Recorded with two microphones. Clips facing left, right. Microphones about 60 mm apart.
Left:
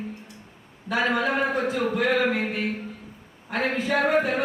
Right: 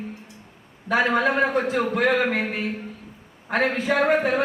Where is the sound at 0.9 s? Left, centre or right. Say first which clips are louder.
Right 3 dB; right.